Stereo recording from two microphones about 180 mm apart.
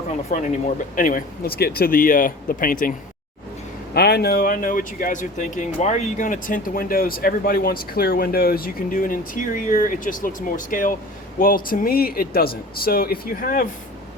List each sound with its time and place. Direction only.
0.9 s speech: 50° left (ahead or behind)
3.9 s speech: 65° left (ahead or behind)